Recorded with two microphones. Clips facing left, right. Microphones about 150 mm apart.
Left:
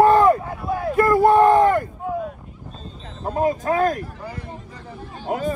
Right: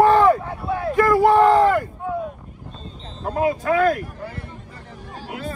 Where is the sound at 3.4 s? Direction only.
40° left (ahead or behind).